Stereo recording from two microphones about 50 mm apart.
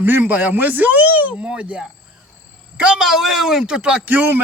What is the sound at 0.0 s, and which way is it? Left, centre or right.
A man's voice, right.